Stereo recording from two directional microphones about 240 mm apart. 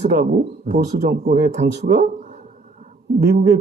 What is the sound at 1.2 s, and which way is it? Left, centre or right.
Speech, right.